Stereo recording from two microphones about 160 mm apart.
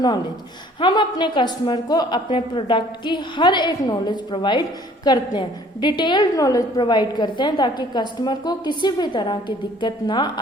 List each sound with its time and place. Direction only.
0.8 s a woman's voice: 30° left (ahead or behind)